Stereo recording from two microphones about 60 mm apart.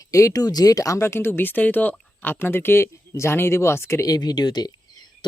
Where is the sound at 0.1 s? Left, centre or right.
Left.